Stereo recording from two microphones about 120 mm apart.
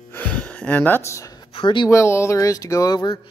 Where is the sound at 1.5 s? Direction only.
40° left (ahead or behind).